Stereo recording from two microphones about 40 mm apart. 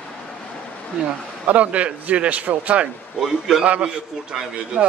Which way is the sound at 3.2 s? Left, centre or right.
Centre.